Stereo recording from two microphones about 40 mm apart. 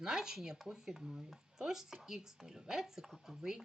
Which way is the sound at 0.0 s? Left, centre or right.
Centre.